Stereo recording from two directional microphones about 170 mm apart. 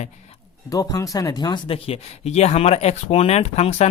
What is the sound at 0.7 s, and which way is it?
Speech, 20° left (ahead or behind).